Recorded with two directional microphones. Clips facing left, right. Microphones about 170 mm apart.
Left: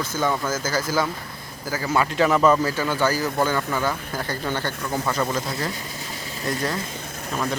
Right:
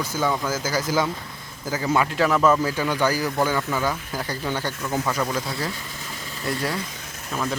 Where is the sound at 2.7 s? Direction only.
15° right (ahead or behind).